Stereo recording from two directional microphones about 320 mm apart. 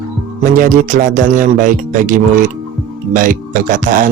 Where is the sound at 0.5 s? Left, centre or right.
Right.